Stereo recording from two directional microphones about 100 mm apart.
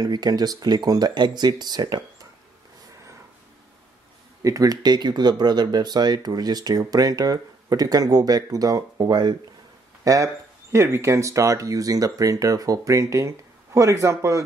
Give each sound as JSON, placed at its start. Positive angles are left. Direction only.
{"t": 0.0, "sound": "speech", "side_deg": -40}
{"t": 4.4, "sound": "speech", "side_deg": -35}
{"t": 10.0, "sound": "speech", "side_deg": -35}